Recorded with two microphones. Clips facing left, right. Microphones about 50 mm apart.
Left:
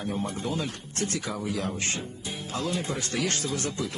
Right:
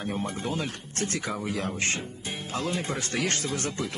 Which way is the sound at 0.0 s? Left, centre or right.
Right.